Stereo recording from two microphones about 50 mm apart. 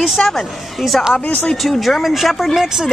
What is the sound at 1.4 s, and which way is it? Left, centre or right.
Speech, centre.